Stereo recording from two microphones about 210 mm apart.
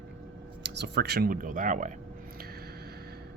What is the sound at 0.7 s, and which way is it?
Speech, 55° right (ahead or behind).